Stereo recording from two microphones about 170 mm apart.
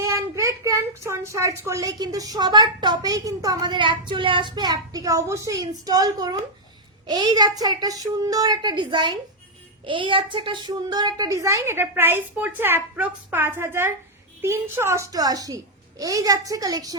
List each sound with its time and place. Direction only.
0.0 s a child's voice: 15° right (ahead or behind)